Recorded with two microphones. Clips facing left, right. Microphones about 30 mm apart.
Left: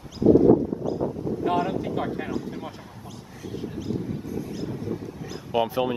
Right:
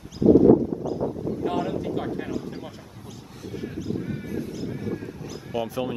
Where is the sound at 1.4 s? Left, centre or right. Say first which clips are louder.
Left 3 dB; centre.